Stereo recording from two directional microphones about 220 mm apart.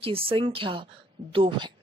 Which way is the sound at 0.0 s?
25° right (ahead or behind).